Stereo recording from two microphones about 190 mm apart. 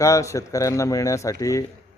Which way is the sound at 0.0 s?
15° left (ahead or behind).